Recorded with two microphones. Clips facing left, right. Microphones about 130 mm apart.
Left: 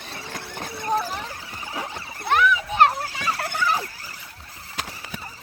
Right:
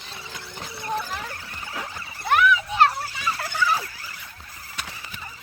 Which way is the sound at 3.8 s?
40° left (ahead or behind).